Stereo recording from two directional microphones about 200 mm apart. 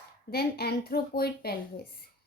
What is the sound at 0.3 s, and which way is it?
A woman's voice, 50° left (ahead or behind).